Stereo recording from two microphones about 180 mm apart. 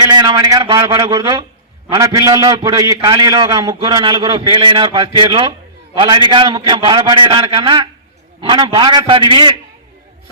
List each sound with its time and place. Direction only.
0.0 s a man's voice: 20° right (ahead or behind)